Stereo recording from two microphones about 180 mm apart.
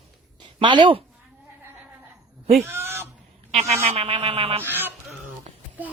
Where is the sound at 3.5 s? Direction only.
35° right (ahead or behind).